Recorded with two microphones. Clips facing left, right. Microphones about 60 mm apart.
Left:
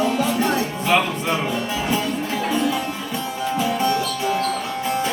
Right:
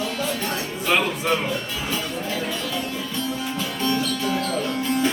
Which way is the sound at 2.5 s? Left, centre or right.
Centre.